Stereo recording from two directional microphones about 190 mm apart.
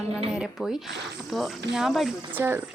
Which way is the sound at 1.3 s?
Centre (ahead or behind).